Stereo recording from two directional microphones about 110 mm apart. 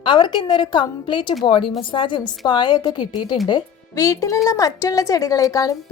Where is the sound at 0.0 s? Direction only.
45° left (ahead or behind).